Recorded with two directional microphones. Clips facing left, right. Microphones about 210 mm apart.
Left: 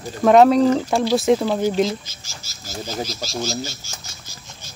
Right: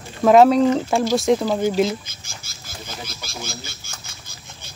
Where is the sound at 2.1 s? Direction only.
55° right (ahead or behind).